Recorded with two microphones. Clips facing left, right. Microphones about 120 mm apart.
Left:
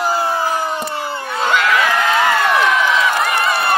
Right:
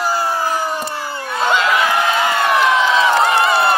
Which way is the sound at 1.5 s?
20° right (ahead or behind).